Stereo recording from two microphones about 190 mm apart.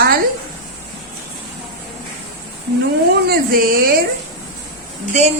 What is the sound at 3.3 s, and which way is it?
Speech, 50° right (ahead or behind).